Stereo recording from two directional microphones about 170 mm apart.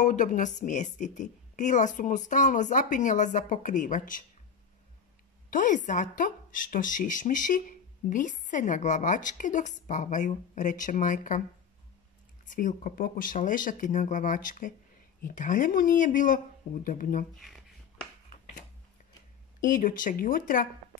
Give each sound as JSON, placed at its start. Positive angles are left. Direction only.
{"t": 0.0, "sound": "a woman's voice", "side_deg": 50}
{"t": 5.5, "sound": "a woman's voice", "side_deg": 50}
{"t": 12.4, "sound": "a woman's voice", "side_deg": 50}
{"t": 19.6, "sound": "a woman's voice", "side_deg": 50}